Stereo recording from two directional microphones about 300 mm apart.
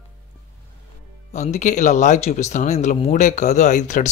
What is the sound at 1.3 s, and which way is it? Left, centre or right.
Speech, left.